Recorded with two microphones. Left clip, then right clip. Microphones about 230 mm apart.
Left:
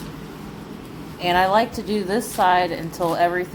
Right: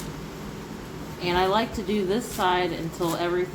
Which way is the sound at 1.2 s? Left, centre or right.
Left.